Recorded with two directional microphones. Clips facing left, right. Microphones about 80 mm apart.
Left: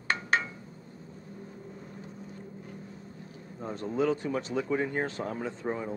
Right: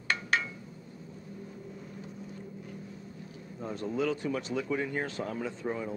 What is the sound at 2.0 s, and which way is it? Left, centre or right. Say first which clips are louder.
Boat: right 1 dB; left.